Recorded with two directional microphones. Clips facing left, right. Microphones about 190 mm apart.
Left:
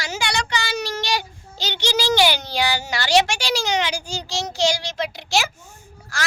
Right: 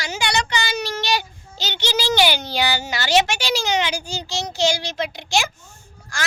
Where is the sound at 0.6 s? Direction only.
20° right (ahead or behind).